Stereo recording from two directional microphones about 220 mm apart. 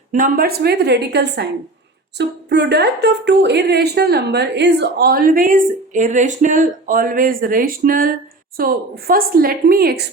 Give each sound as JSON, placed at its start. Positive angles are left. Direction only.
{"t": 0.1, "sound": "a woman's voice", "side_deg": -40}